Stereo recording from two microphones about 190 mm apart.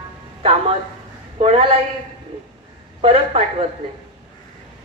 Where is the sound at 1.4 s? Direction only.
30° right (ahead or behind).